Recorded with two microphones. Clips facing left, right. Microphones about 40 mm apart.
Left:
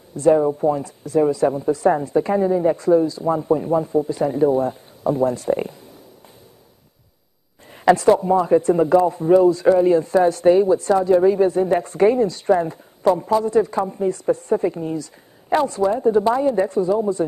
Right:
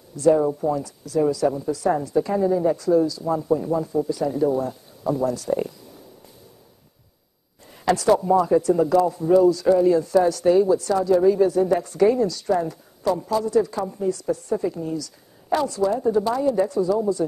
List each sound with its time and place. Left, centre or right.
0.1 s speech: left
7.6 s speech: left